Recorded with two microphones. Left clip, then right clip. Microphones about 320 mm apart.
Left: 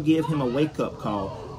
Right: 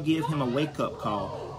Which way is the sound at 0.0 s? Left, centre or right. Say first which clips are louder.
Left 4 dB; centre.